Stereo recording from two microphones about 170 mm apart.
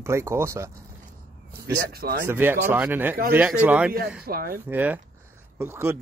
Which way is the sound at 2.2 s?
10° right (ahead or behind).